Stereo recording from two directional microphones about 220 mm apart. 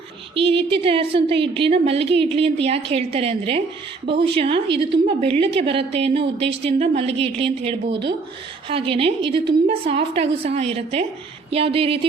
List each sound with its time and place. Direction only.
0.3 s a woman's voice: 25° right (ahead or behind)